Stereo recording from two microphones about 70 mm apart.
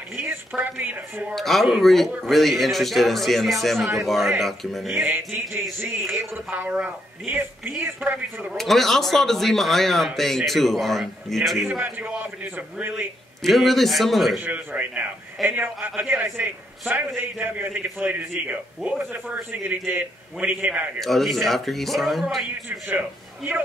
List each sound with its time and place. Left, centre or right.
0.1 s a sound: right
0.6 s speech: right
1.3 s speech: centre
5.0 s speech: right
6.6 s speech: right
8.5 s speech: centre
11.8 s speech: right
13.4 s speech: centre
14.4 s speech: right
21.0 s speech: centre
22.7 s a man's voice: right